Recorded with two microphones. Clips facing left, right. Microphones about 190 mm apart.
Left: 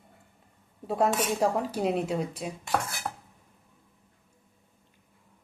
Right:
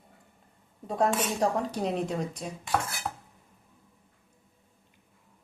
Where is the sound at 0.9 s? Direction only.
5° left (ahead or behind).